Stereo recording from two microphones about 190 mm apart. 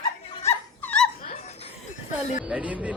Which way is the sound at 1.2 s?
30° left (ahead or behind).